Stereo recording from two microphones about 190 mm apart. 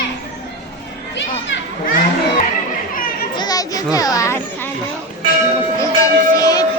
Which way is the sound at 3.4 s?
20° left (ahead or behind).